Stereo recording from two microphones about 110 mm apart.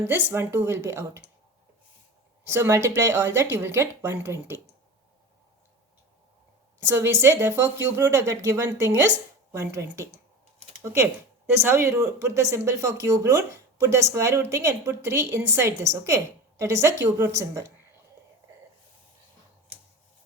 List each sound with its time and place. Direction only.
0.3 s speech: 20° right (ahead or behind)
2.5 s speech: 25° right (ahead or behind)
6.7 s speech: 25° right (ahead or behind)
11.5 s speech: 20° right (ahead or behind)